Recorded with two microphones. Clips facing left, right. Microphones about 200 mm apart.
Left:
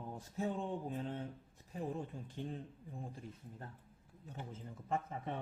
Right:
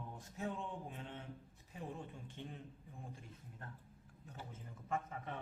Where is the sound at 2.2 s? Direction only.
35° left (ahead or behind).